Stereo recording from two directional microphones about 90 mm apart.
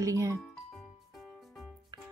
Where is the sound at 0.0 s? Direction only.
35° right (ahead or behind).